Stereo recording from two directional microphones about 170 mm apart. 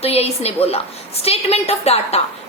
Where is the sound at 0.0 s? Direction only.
35° left (ahead or behind).